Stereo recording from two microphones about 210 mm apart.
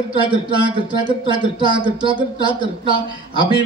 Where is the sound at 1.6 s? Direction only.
20° right (ahead or behind).